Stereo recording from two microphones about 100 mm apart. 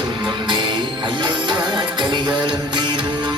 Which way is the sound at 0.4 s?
55° right (ahead or behind).